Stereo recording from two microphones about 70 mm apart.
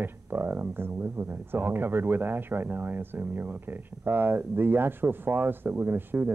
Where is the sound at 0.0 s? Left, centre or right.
Right.